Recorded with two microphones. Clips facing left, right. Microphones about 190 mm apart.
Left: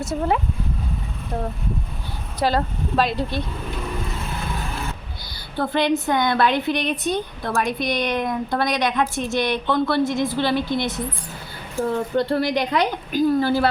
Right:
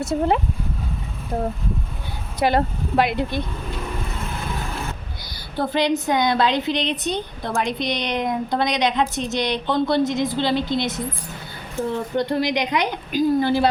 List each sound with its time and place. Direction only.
0.0 s speech: 30° right (ahead or behind)
2.4 s a woman's voice: 20° right (ahead or behind)
5.5 s a woman's voice: 20° right (ahead or behind)